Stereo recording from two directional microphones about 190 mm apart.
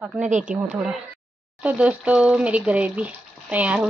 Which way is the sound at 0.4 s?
5° right (ahead or behind).